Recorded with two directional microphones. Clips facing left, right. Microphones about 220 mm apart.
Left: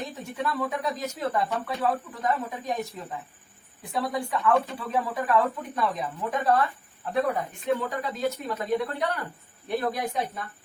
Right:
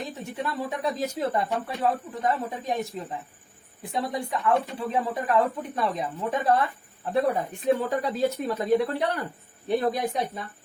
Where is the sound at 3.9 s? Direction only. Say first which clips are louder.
Even; 25° right (ahead or behind).